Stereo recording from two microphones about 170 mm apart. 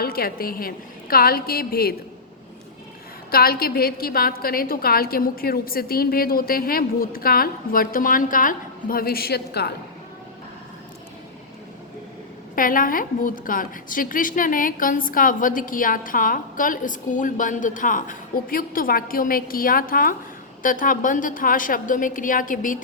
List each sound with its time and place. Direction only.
0.0 s a woman's voice: 65° left (ahead or behind)
3.3 s a woman's voice: 60° left (ahead or behind)
12.5 s a woman's voice: 55° left (ahead or behind)